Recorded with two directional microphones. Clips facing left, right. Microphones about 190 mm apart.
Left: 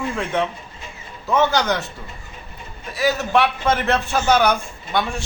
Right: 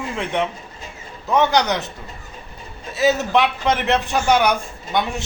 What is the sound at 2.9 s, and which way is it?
A man's voice, 20° right (ahead or behind).